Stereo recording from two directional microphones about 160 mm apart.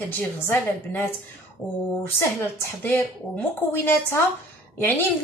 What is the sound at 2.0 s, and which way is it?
A woman's voice, 15° left (ahead or behind).